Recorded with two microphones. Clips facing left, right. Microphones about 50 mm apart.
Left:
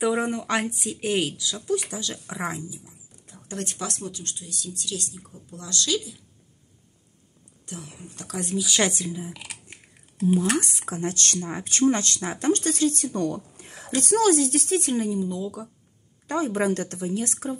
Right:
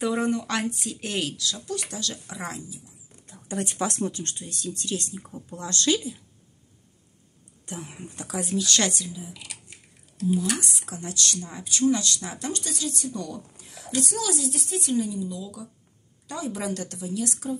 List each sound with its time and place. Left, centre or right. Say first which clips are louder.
0.0 s speech: left 1 dB; centre
3.4 s speech: right 3 dB; centre
3.8 s speech: right 5 dB; right
7.6 s speech: right 2 dB; right
8.2 s speech: right 1 dB; centre
8.6 s speech: left 4 dB; centre
9.0 s speech: left 5 dB; left